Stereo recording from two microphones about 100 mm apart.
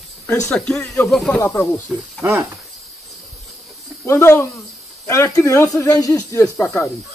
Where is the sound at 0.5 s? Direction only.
5° left (ahead or behind).